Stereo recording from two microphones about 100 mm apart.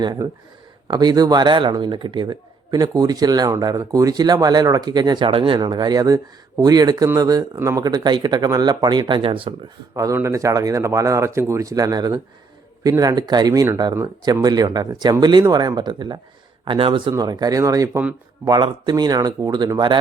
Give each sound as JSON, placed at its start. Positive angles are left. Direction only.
{"t": 0.9, "sound": "speech", "side_deg": -40}
{"t": 9.9, "sound": "speech", "side_deg": -35}
{"t": 17.1, "sound": "speech", "side_deg": -40}
{"t": 18.4, "sound": "speech", "side_deg": -45}